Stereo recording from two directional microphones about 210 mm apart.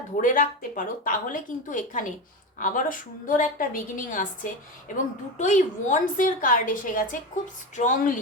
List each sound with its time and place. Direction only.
0.2 s a woman's voice: 40° left (ahead or behind)
5.4 s a woman's voice: 35° left (ahead or behind)